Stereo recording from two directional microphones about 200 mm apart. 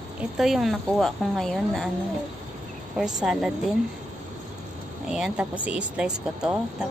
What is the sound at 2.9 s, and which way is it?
Speech, 5° right (ahead or behind).